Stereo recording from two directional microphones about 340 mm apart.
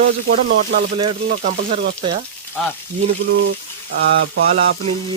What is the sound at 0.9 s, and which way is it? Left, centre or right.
Speech, centre.